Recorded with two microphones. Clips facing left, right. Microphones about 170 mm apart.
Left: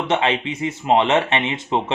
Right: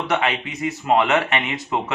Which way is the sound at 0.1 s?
25° left (ahead or behind).